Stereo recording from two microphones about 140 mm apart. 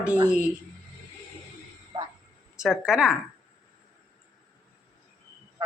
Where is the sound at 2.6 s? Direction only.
5° right (ahead or behind).